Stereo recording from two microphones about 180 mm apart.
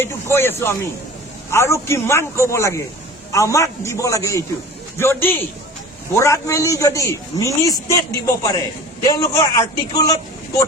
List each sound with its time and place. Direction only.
0.0 s a man's voice: 15° left (ahead or behind)